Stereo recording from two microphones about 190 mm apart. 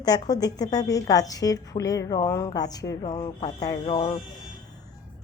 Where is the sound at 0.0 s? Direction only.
20° left (ahead or behind).